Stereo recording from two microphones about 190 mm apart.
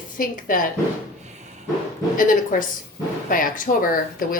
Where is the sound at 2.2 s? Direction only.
45° left (ahead or behind).